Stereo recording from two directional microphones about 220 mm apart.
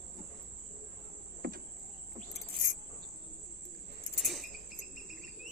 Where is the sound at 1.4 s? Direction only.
50° right (ahead or behind).